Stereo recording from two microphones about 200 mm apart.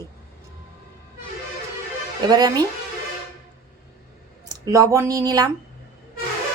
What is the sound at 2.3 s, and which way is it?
Speech, 20° right (ahead or behind).